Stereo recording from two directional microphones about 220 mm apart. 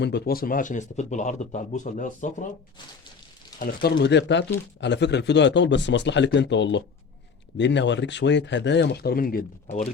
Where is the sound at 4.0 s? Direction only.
50° left (ahead or behind).